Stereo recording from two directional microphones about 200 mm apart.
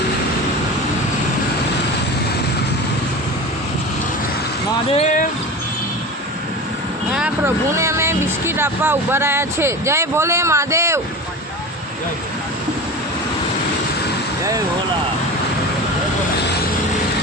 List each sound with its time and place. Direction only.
4.9 s speech: 40° left (ahead or behind)
7.1 s speech: 5° right (ahead or behind)